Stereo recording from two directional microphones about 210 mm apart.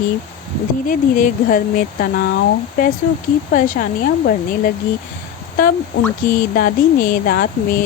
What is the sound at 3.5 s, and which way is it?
Speech, 40° left (ahead or behind).